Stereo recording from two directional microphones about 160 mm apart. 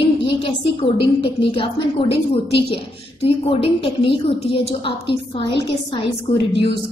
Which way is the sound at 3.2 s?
35° left (ahead or behind).